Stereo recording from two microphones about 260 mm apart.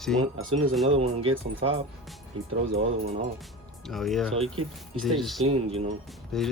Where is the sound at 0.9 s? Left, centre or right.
Right.